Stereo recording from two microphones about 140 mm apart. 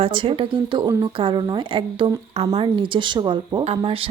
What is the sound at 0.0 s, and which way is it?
Speech, 40° right (ahead or behind).